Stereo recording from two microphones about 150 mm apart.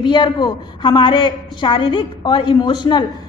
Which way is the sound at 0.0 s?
30° left (ahead or behind).